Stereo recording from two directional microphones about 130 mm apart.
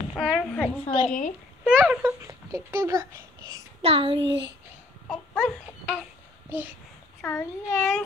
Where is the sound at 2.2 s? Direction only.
20° right (ahead or behind).